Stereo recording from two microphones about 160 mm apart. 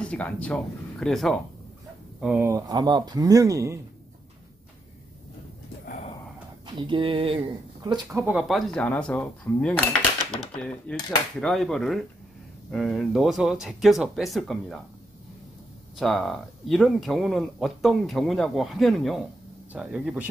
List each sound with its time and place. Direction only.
0.0 s speech: 5° left (ahead or behind)
2.4 s speech: 20° right (ahead or behind)
5.9 s gasp: 50° left (ahead or behind)
6.7 s speech: 30° right (ahead or behind); by 9.8 s 5° left (ahead or behind)
10.6 s typewriter: 5° left (ahead or behind)
11.1 s speech: centre (ahead or behind)
16.0 s speech: centre (ahead or behind)